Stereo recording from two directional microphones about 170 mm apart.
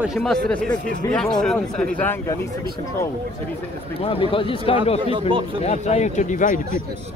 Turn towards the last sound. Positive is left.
turn(degrees=50)  # may be behind; listen again after turning